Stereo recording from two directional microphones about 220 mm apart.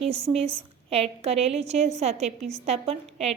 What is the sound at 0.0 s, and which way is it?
A woman's voice, 25° right (ahead or behind).